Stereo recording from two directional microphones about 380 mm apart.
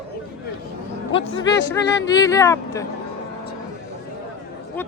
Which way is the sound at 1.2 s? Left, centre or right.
Left.